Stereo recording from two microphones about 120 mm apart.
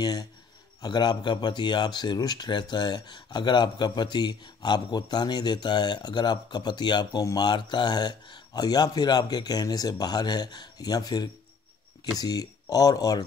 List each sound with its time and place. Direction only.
0.0 s speech: 30° left (ahead or behind)